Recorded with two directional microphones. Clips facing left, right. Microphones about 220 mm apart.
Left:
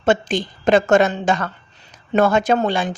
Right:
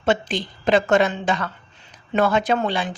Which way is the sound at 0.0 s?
45° left (ahead or behind).